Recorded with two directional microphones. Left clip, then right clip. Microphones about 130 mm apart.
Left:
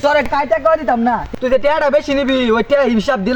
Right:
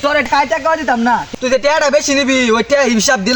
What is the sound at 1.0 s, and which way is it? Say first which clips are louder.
Speech: right 2 dB; centre (ahead or behind).